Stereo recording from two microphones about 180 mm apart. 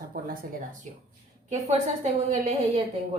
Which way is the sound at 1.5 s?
40° right (ahead or behind).